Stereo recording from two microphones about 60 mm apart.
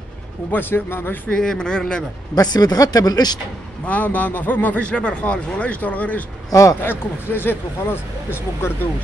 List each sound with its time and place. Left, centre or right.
0.5 s speech: left
1.3 s speech: centre
2.3 s speech: left
3.8 s speech: left
6.5 s speech: left
6.8 s speech: left